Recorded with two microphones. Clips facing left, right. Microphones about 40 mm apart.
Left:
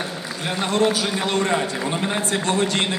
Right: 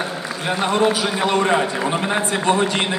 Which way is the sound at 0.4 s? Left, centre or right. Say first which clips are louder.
Right 2 dB; centre.